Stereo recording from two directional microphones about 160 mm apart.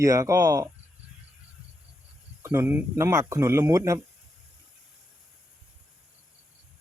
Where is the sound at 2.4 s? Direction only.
15° right (ahead or behind).